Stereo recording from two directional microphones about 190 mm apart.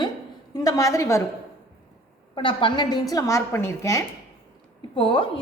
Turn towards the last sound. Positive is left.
turn(degrees=25)  # may be behind; listen again after turning